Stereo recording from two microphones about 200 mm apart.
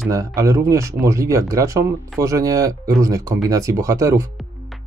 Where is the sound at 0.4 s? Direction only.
15° right (ahead or behind).